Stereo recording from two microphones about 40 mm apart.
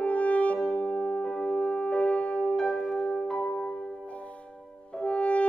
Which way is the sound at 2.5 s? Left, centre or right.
Left.